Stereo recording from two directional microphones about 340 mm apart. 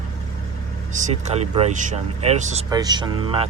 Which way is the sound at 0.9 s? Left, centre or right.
Right.